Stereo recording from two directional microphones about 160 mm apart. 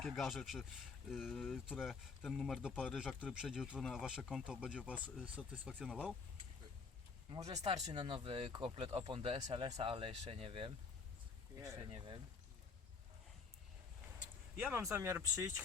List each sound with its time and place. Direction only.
0.0 s speech: centre (ahead or behind)
7.4 s speech: 40° right (ahead or behind)
7.9 s speech: 30° right (ahead or behind)
11.9 s speech: 35° right (ahead or behind)
14.5 s speech: 15° right (ahead or behind)